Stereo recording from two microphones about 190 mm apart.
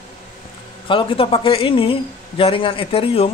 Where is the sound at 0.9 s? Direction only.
25° left (ahead or behind).